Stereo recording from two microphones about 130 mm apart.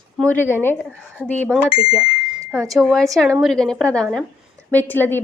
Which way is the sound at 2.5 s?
25° right (ahead or behind).